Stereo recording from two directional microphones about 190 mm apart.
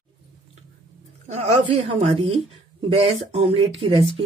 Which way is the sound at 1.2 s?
35° right (ahead or behind).